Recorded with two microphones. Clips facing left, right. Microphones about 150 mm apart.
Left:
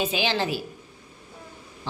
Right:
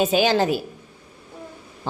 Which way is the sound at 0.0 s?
45° right (ahead or behind).